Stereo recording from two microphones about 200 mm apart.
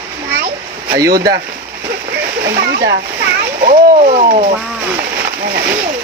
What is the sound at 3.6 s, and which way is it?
Speech, 40° right (ahead or behind).